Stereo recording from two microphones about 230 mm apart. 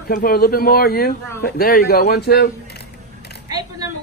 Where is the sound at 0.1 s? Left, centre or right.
Left.